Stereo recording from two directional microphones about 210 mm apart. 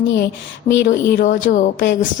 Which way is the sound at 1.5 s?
45° left (ahead or behind).